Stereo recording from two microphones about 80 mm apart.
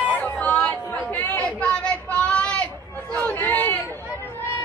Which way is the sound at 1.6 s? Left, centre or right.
Centre.